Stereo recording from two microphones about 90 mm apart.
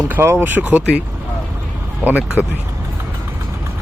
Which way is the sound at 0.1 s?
25° right (ahead or behind).